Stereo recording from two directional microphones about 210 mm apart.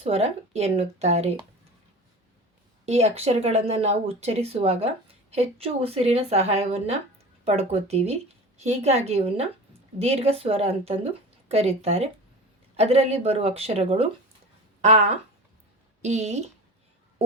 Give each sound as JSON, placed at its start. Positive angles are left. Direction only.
{"t": 0.0, "sound": "speech", "side_deg": -30}
{"t": 2.8, "sound": "a woman's voice", "side_deg": -30}